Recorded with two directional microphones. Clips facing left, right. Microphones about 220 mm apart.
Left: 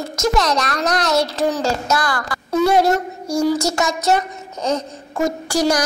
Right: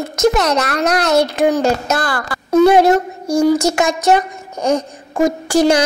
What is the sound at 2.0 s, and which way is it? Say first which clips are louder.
Speech: right 2 dB; 25° right (ahead or behind).